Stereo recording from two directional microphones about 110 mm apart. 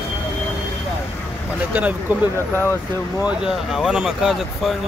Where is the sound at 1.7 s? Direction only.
15° right (ahead or behind).